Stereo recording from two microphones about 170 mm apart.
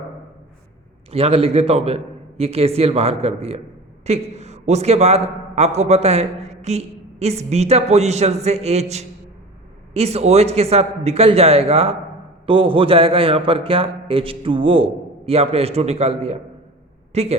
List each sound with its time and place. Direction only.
1.1 s a man's voice: 35° right (ahead or behind)